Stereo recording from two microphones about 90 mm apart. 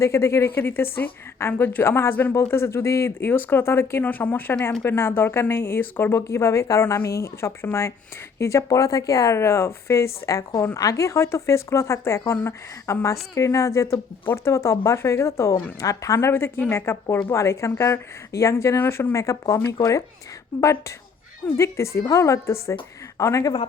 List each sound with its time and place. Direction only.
0.0 s speech: 30° left (ahead or behind)